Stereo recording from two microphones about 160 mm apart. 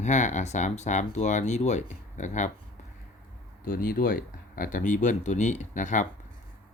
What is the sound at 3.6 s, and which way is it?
Speech, 65° left (ahead or behind).